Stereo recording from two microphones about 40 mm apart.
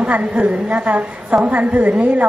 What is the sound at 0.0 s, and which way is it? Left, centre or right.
A woman's voice, right.